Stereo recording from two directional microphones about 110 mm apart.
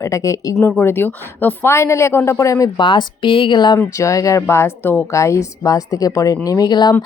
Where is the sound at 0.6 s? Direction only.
20° left (ahead or behind).